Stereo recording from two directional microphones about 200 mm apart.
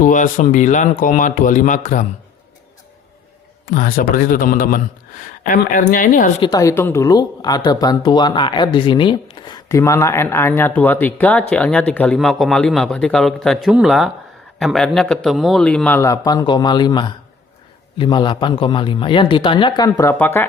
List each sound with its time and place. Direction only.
0.0 s speech: 40° left (ahead or behind)
3.7 s a man's voice: 45° left (ahead or behind)
6.4 s speech: 15° left (ahead or behind)